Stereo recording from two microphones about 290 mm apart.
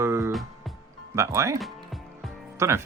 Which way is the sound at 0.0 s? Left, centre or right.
Centre.